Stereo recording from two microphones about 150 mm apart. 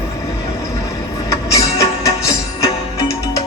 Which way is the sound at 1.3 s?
20° left (ahead or behind).